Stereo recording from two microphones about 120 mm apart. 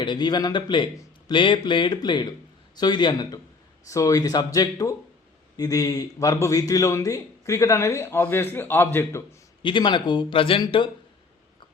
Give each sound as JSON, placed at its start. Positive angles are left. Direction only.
{"t": 0.0, "sound": "a man's voice", "side_deg": 40}
{"t": 9.6, "sound": "speech", "side_deg": 40}